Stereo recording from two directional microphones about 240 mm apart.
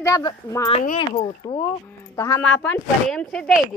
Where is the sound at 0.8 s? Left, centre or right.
Left.